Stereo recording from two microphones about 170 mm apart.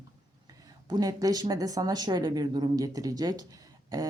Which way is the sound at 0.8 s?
25° right (ahead or behind).